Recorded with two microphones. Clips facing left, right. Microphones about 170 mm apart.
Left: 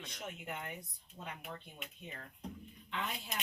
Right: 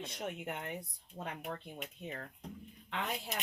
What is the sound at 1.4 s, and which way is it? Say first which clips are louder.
Speech: right 5 dB; 50° right (ahead or behind).